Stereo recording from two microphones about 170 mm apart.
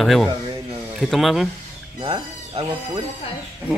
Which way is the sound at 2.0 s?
35° right (ahead or behind).